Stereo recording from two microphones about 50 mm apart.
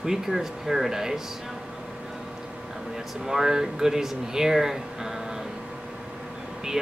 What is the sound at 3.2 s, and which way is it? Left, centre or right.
Speech, centre.